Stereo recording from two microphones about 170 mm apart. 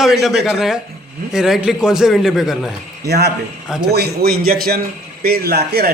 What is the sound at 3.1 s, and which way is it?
A man's voice, 70° right (ahead or behind).